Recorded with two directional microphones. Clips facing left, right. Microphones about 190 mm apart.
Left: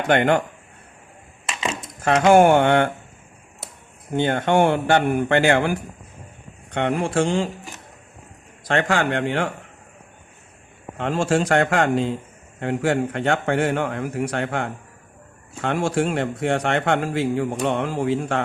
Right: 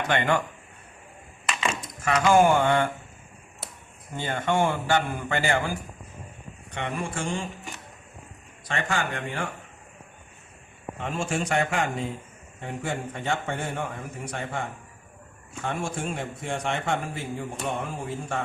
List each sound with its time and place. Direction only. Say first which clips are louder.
0.1 s a man's voice: left 7 dB; 60° left (ahead or behind)
2.0 s speech: left 6 dB; 70° left (ahead or behind)
4.1 s a man's voice: left 7 dB; 65° left (ahead or behind); by 7.5 s 90° left
8.6 s a man's voice: left 8 dB; 85° left
10.9 s a man's voice: left 9 dB; 85° left